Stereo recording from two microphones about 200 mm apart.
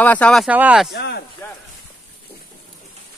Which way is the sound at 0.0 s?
5° left (ahead or behind).